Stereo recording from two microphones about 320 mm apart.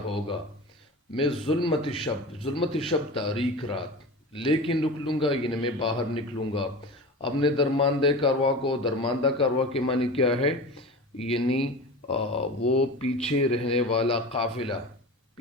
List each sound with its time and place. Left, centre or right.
1.1 s a man's voice: centre
12.6 s speech: left
13.2 s a man's voice: centre